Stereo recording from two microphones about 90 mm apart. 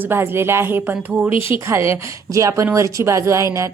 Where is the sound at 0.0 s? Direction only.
25° right (ahead or behind).